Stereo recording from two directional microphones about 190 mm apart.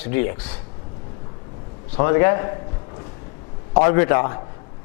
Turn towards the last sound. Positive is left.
turn(degrees=15)  # may be behind; listen again after turning